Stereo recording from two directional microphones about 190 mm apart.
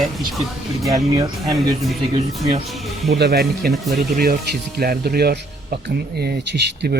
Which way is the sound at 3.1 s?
60° right (ahead or behind).